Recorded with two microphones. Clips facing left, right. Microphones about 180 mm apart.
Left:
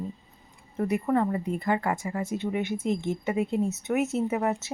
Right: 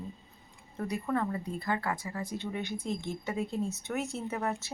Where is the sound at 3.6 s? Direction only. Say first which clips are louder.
Left 8 dB; 20° left (ahead or behind).